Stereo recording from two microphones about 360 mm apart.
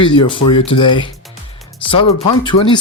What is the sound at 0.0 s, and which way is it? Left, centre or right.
Speech, centre.